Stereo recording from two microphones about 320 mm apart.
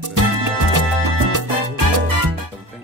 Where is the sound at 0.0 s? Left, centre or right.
Right.